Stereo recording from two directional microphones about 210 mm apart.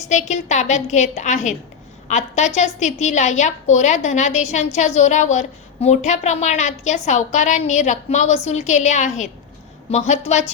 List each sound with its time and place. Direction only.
0.1 s a woman's voice: 35° left (ahead or behind)